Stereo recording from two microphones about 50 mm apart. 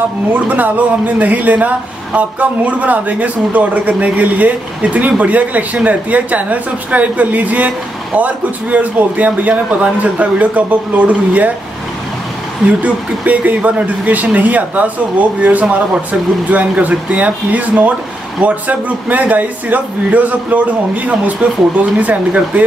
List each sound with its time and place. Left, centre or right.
0.3 s speech: right
12.6 s speech: right